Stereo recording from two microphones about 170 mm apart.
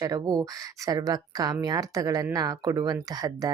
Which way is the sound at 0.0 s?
20° right (ahead or behind).